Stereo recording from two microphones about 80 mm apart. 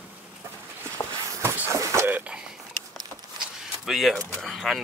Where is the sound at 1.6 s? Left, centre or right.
Right.